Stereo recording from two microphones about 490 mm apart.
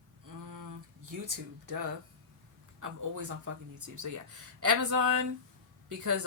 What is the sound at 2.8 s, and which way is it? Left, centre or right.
Speech, right.